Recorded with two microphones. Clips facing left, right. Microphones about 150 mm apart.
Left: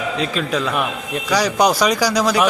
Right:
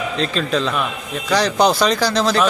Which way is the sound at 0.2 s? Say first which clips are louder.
Right 3 dB; 10° left (ahead or behind).